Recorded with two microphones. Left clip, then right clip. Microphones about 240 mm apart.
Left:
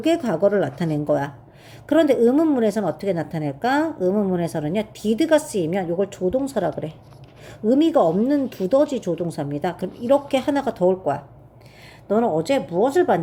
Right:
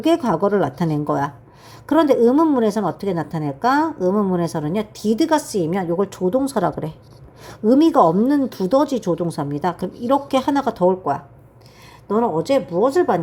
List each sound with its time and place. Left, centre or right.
0.0 s a woman's voice: centre